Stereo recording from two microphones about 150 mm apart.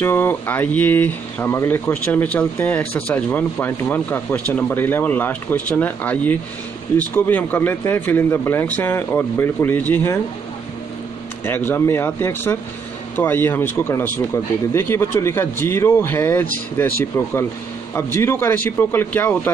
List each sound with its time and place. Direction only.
0.0 s speech: 15° left (ahead or behind)
11.4 s speech: 15° left (ahead or behind)